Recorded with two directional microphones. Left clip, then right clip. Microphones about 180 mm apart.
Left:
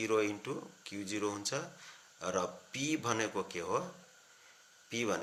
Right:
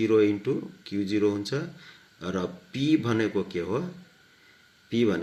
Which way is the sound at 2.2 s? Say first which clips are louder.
Right 4 dB; 15° left (ahead or behind).